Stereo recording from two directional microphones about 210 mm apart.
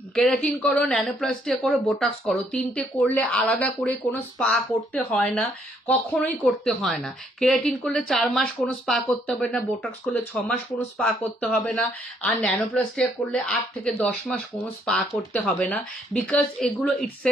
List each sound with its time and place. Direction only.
0.1 s speech: 5° left (ahead or behind)